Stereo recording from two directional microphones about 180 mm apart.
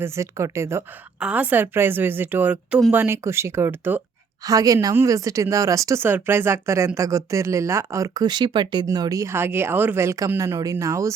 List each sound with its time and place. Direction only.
0.0 s speech: 15° right (ahead or behind)